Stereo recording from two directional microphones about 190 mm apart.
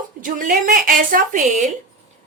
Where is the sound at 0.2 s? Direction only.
45° right (ahead or behind).